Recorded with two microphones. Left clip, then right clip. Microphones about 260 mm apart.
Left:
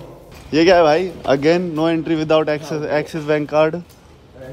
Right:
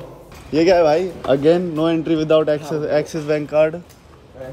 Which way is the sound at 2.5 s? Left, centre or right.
Centre.